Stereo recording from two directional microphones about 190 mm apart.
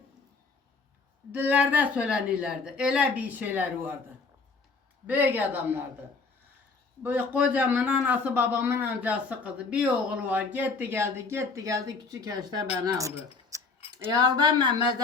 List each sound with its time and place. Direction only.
1.3 s a man's voice: 10° right (ahead or behind)
5.0 s a man's voice: 10° right (ahead or behind)
7.0 s a man's voice: 10° right (ahead or behind)
13.5 s keys jangling: 15° right (ahead or behind)
14.1 s speech: 20° right (ahead or behind)